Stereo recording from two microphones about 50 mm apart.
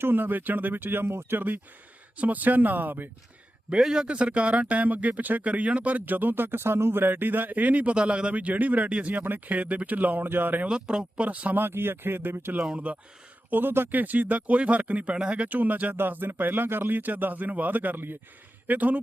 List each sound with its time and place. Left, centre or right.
0.0 s speech: right
1.4 s speech: right
3.7 s speech: centre
9.2 s speech: right
10.7 s speech: centre
11.5 s speech: right
12.7 s speech: right
13.5 s speech: right
15.4 s speech: right